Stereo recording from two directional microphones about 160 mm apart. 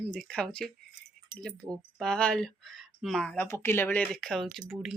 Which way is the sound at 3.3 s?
15° left (ahead or behind).